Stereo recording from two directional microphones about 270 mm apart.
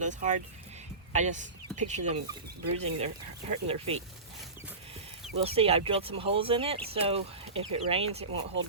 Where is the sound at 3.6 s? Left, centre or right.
Right.